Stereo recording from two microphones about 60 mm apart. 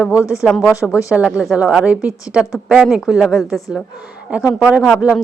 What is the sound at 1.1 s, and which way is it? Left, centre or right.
Speech, centre.